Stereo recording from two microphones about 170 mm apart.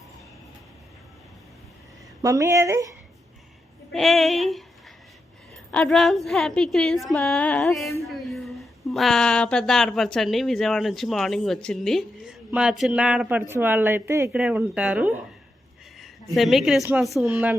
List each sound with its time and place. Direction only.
2.2 s speech: 20° right (ahead or behind)
3.9 s a woman's voice: centre (ahead or behind)
5.7 s a woman's voice: 5° left (ahead or behind)